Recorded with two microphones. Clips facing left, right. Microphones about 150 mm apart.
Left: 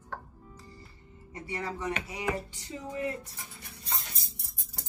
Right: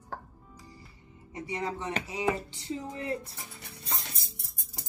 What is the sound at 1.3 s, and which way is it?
Speech, 20° right (ahead or behind).